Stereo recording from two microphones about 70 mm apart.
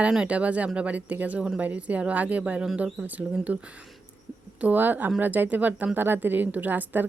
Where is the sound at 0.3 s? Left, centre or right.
Centre.